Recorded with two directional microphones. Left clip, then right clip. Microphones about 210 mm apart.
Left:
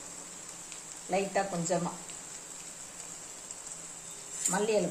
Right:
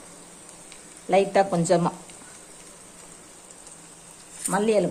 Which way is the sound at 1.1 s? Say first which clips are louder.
Right 11 dB; 40° right (ahead or behind).